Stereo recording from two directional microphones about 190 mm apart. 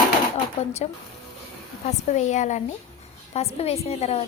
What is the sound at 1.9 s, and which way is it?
A woman's voice, 35° left (ahead or behind).